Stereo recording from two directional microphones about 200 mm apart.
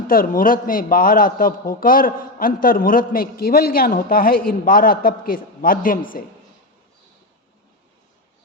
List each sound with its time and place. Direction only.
0.1 s a man's voice: 45° left (ahead or behind)